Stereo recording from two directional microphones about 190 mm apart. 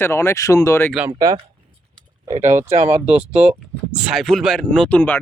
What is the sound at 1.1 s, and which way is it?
Speech, 20° right (ahead or behind).